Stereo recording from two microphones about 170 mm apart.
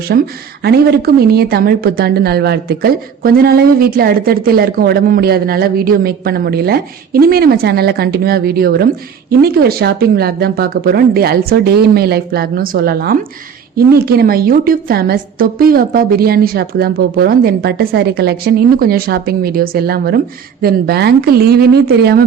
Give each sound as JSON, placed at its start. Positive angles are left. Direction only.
{"t": 0.1, "sound": "a woman's voice", "side_deg": -65}